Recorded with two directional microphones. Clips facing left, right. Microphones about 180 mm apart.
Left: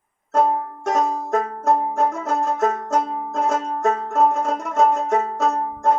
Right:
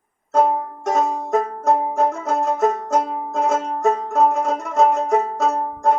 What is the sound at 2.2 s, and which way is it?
Music, centre (ahead or behind).